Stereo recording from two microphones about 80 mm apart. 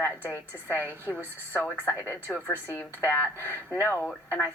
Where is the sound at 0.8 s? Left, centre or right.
Right.